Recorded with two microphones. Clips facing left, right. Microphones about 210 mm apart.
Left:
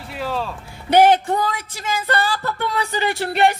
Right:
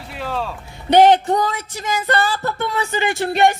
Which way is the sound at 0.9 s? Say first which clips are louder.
Right 2 dB; 20° right (ahead or behind).